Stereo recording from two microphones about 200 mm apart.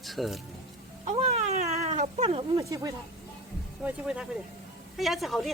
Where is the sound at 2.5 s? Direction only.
15° right (ahead or behind).